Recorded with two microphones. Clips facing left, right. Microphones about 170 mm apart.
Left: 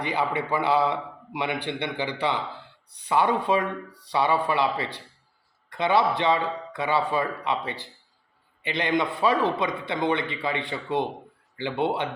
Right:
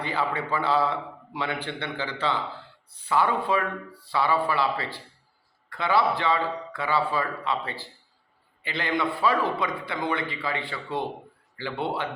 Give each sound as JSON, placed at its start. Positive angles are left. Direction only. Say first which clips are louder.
{"t": 0.0, "sound": "a man's voice", "louder": "left 2 dB", "side_deg": 15}